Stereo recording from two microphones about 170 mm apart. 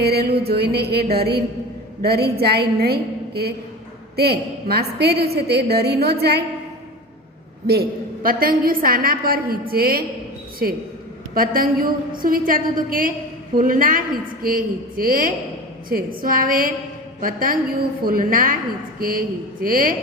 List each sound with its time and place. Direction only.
0.0 s a woman's voice: 70° right (ahead or behind)
7.7 s a woman's voice: 60° right (ahead or behind)
11.3 s a woman's voice: 60° right (ahead or behind)